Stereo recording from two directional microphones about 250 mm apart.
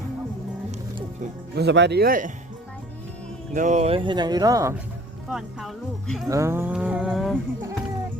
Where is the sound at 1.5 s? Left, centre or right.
Right.